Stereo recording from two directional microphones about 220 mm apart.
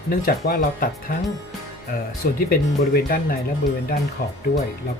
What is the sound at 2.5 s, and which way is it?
Speech, 40° left (ahead or behind).